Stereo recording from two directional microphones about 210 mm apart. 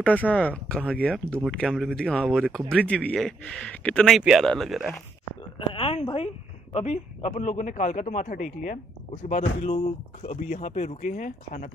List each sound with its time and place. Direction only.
0.0 s speech: 5° left (ahead or behind)
5.7 s a sound: 25° left (ahead or behind)
6.7 s a man's voice: 30° left (ahead or behind)